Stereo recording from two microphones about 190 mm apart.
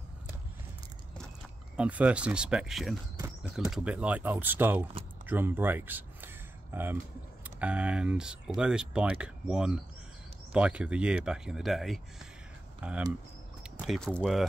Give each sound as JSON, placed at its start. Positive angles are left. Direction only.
{"t": 1.8, "sound": "speech", "side_deg": -5}
{"t": 5.2, "sound": "a sound", "side_deg": -10}
{"t": 7.4, "sound": "speech", "side_deg": -10}